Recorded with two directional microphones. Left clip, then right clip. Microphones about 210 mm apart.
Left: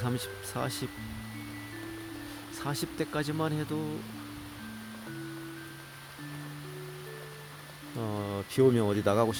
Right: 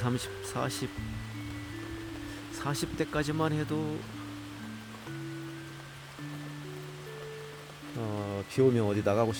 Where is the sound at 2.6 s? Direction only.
Centre (ahead or behind).